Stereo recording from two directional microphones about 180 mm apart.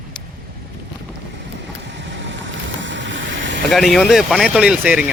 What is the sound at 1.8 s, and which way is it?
Vehicle, 75° right (ahead or behind).